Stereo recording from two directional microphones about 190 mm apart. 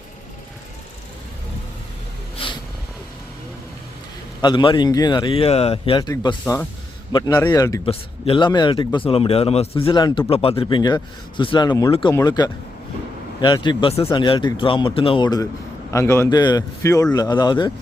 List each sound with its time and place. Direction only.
2.4 s cat: 30° left (ahead or behind)
4.4 s a man's voice: 25° left (ahead or behind)